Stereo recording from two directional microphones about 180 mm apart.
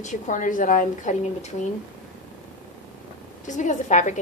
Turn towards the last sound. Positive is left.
turn(degrees=40)  # may be behind; listen again after turning